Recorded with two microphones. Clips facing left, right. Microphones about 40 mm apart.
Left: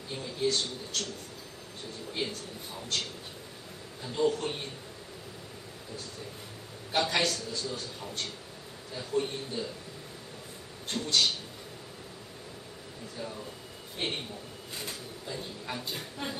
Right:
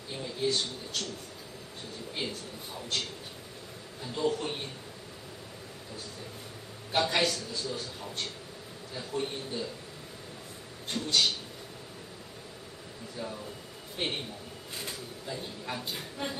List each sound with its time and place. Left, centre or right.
0.1 s speech: centre
2.2 s speech: centre
4.0 s speech: centre
6.9 s speech: centre
10.9 s speech: right
13.2 s speech: centre